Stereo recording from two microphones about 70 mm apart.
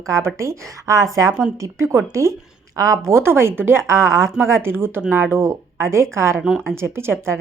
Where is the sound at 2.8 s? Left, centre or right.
Right.